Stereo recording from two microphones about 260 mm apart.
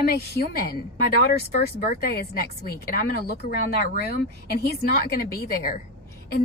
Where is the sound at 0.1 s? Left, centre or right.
Left.